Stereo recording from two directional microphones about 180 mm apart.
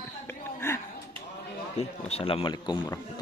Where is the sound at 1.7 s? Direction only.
35° left (ahead or behind).